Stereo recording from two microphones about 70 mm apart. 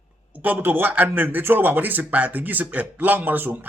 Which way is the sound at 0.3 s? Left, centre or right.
Right.